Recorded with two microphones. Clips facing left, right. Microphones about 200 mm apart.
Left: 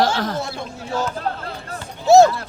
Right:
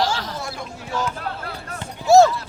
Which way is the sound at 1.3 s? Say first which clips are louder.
Left 4 dB; 40° left (ahead or behind).